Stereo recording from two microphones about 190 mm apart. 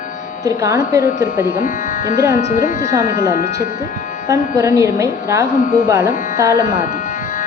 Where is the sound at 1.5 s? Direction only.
45° left (ahead or behind).